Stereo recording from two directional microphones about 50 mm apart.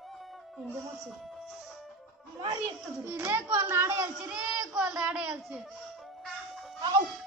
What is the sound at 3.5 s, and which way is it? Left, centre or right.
Speech, right.